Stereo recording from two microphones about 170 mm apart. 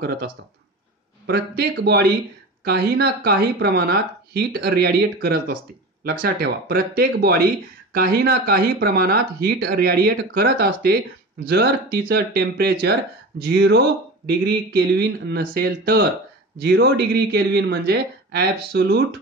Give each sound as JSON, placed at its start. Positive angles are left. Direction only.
{"t": 1.2, "sound": "speech", "side_deg": -70}